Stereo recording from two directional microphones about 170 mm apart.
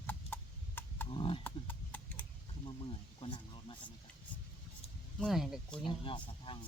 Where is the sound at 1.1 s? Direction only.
30° left (ahead or behind).